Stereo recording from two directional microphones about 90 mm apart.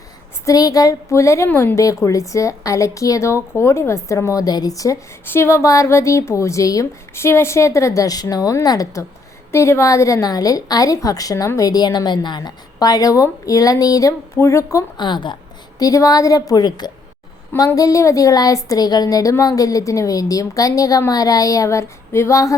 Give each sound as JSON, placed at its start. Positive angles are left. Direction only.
{"t": 0.4, "sound": "a woman's voice", "side_deg": 40}
{"t": 5.2, "sound": "a woman's voice", "side_deg": 25}
{"t": 14.9, "sound": "a woman's voice", "side_deg": 55}
{"t": 15.8, "sound": "a woman's voice", "side_deg": 40}
{"t": 17.7, "sound": "a woman's voice", "side_deg": 40}